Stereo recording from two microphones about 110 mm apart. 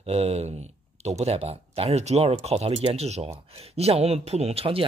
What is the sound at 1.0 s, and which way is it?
Speech, 80° right.